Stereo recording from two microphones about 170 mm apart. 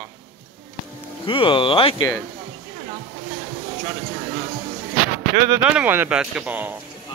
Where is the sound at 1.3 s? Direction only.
30° left (ahead or behind).